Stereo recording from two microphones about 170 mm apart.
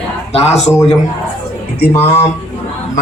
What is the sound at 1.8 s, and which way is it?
Speech, 70° left (ahead or behind).